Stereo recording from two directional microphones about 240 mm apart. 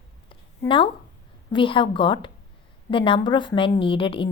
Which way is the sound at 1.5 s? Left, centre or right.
Left.